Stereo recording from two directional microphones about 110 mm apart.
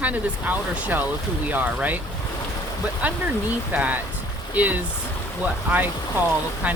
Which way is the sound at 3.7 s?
15° right (ahead or behind).